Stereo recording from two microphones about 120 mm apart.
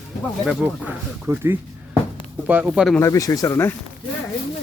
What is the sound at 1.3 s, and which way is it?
Speech, 20° right (ahead or behind).